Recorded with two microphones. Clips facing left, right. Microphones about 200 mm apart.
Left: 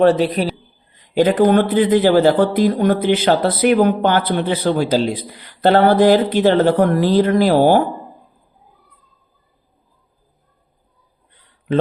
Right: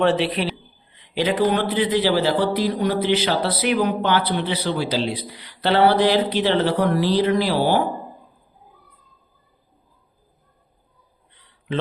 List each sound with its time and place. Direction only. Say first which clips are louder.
0.0 s a man's voice: left 6 dB; 40° left (ahead or behind)